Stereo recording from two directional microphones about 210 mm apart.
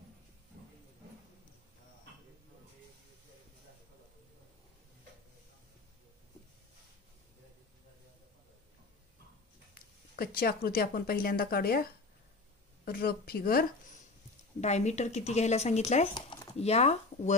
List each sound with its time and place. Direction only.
10.1 s speech: 45° left (ahead or behind)
12.8 s speech: 45° left (ahead or behind)
14.6 s speech: 35° left (ahead or behind)
16.2 s a sound: 20° left (ahead or behind)